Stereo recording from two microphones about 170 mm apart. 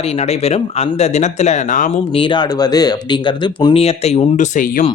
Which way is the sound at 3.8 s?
40° left (ahead or behind).